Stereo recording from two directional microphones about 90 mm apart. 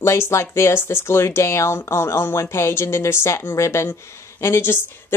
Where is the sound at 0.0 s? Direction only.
30° left (ahead or behind).